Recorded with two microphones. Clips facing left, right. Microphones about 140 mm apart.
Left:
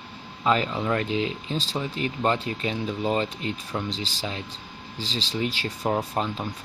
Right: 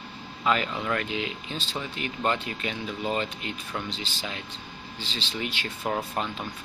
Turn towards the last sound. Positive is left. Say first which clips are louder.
# left 3 dB
turn(degrees=30)  # may be behind; listen again after turning